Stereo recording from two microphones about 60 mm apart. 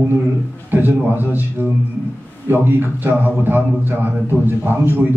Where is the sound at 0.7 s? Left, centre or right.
Right.